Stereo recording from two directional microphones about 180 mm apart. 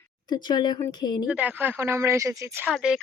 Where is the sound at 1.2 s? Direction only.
10° right (ahead or behind).